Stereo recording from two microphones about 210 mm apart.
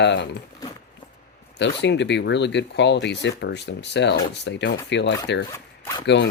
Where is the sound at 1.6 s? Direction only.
55° left (ahead or behind).